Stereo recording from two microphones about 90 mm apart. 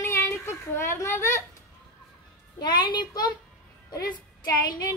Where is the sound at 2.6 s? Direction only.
55° left (ahead or behind).